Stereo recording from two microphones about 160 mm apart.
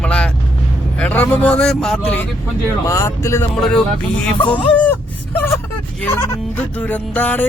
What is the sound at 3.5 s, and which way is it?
Speech, 5° left (ahead or behind).